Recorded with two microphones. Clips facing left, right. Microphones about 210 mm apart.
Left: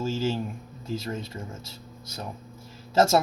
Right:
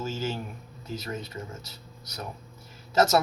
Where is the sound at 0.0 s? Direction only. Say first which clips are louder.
Left 4 dB; 30° left (ahead or behind).